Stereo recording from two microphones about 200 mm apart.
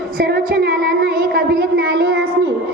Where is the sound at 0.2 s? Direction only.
45° right (ahead or behind).